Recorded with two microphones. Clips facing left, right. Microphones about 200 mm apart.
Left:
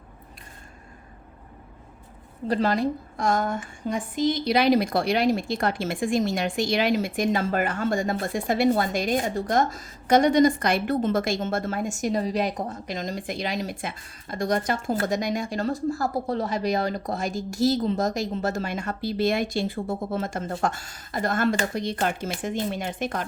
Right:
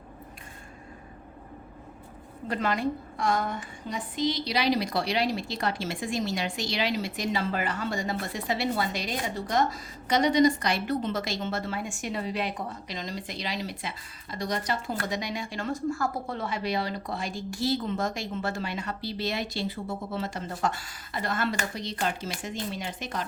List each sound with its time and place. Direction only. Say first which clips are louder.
2.5 s speech: left 5 dB; 35° left (ahead or behind); by 23.2 s 55° left (ahead or behind)